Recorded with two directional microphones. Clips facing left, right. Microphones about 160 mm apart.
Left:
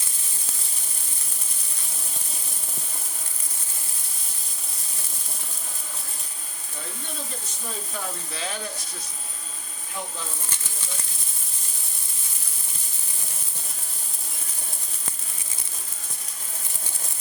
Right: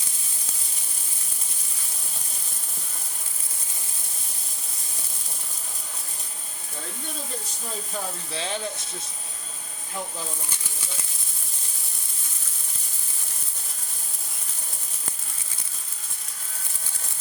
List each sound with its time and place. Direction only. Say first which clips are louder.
8.3 s speech: right 2 dB; 30° right (ahead or behind)